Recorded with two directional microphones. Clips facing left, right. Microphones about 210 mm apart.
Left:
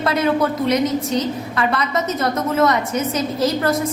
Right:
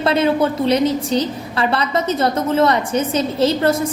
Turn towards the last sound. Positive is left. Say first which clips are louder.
# right 3 dB
turn(degrees=-30)  # may be behind; listen again after turning